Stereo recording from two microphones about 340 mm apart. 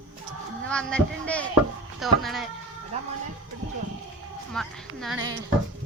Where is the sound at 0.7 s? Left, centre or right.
Centre.